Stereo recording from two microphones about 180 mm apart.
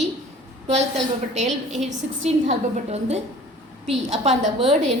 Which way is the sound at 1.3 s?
40° right (ahead or behind).